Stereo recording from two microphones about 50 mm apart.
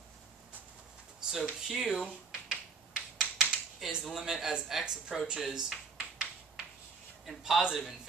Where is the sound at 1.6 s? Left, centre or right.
Centre.